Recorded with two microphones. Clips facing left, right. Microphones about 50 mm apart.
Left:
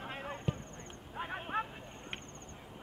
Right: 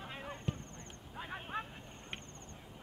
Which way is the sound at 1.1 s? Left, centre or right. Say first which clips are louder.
Left 4 dB; left.